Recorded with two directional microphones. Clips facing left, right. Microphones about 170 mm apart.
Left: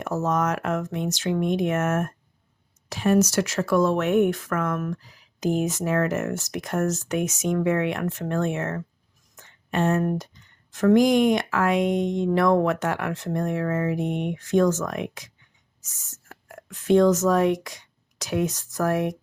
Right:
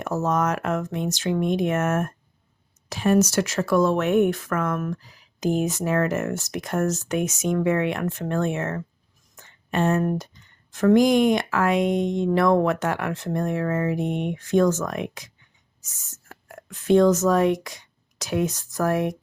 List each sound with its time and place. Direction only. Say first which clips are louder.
0.0 s speech: right 1 dB; 30° right (ahead or behind)
16.3 s speech: right 1 dB; 30° right (ahead or behind)